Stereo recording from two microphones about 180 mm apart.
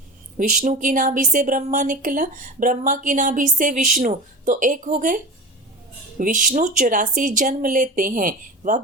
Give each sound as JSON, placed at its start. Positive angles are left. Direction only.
{"t": 0.3, "sound": "speech", "side_deg": -45}